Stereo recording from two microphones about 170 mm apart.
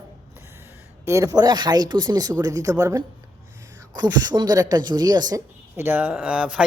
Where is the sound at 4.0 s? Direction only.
25° right (ahead or behind).